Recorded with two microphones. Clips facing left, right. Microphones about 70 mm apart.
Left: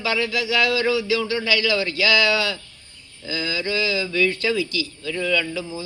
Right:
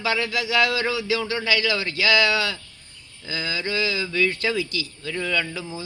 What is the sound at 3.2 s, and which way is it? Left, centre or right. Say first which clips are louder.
Speech: left 2 dB; right.